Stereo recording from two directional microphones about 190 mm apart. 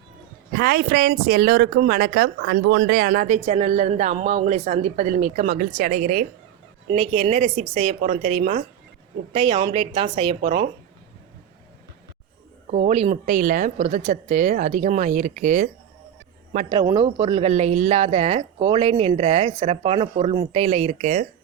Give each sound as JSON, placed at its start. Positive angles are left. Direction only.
{"t": 0.5, "sound": "speech", "side_deg": -55}
{"t": 6.9, "sound": "speech", "side_deg": -30}
{"t": 12.7, "sound": "speech", "side_deg": -35}
{"t": 16.8, "sound": "speech", "side_deg": -25}